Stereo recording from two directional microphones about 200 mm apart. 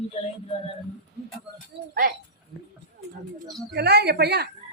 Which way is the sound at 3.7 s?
55° right (ahead or behind).